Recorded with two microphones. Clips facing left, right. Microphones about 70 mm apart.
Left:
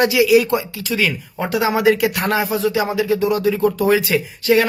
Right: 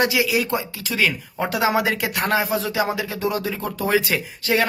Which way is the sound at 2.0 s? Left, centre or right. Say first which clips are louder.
Left 3 dB; right.